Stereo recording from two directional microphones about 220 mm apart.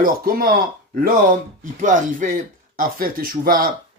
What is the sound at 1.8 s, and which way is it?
Speech, 35° right (ahead or behind).